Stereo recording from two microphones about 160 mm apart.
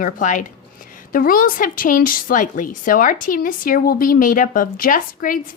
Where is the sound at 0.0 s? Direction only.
55° left (ahead or behind).